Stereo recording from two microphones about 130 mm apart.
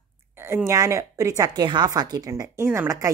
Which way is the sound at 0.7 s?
25° right (ahead or behind).